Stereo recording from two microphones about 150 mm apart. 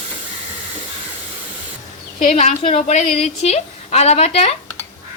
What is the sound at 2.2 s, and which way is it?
A woman's voice, 50° left (ahead or behind).